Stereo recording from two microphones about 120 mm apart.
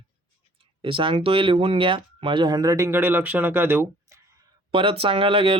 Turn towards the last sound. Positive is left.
turn(degrees=-50)  # may be behind; listen again after turning